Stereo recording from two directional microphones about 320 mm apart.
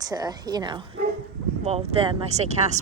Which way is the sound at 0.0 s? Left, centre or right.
Centre.